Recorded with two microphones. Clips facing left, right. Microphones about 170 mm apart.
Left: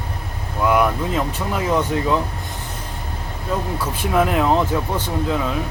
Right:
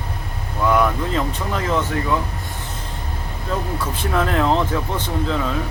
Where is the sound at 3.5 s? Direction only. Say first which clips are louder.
Left 1 dB; 10° left (ahead or behind).